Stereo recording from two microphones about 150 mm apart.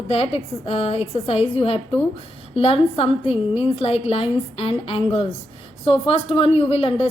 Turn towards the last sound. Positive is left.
turn(degrees=40)  # may be behind; listen again after turning